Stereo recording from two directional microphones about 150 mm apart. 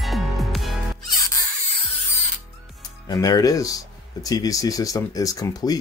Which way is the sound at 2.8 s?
25° left (ahead or behind).